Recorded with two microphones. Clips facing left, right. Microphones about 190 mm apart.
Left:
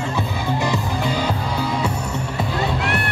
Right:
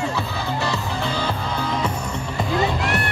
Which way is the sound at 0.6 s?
15° left (ahead or behind).